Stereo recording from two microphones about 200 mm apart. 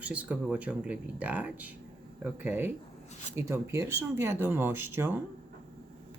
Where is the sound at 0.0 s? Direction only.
5° right (ahead or behind).